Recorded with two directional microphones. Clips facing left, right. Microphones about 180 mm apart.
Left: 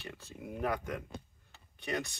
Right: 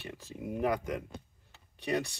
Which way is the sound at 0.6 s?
15° right (ahead or behind).